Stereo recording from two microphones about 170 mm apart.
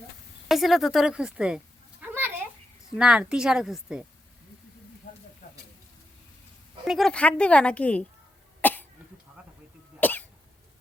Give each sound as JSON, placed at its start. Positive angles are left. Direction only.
{"t": 0.4, "sound": "a sound", "side_deg": 0}
{"t": 2.9, "sound": "a woman's voice", "side_deg": -5}
{"t": 5.4, "sound": "snake", "side_deg": 50}
{"t": 6.8, "sound": "a woman's voice", "side_deg": 0}
{"t": 8.6, "sound": "cough", "side_deg": 10}
{"t": 10.0, "sound": "cough", "side_deg": 10}